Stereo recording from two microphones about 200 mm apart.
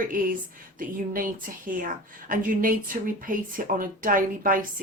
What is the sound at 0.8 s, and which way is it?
Speech, 45° right (ahead or behind).